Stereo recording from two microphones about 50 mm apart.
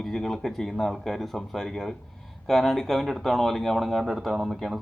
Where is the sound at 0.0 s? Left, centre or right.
Centre.